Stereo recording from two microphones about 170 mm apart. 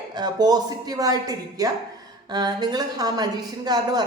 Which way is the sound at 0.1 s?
25° right (ahead or behind).